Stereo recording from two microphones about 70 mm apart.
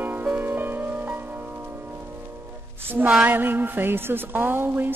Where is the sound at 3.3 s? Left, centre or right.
Right.